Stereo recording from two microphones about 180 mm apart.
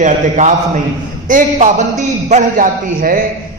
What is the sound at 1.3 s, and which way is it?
A man's voice, 45° right (ahead or behind).